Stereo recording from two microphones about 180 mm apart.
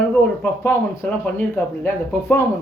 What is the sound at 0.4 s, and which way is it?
Speech, 10° left (ahead or behind).